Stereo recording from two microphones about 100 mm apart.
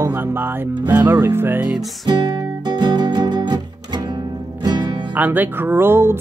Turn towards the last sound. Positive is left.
turn(degrees=-25)  # may be behind; listen again after turning